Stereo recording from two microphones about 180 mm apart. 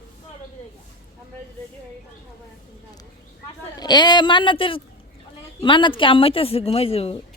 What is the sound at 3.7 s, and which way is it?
A man's voice, 25° left (ahead or behind).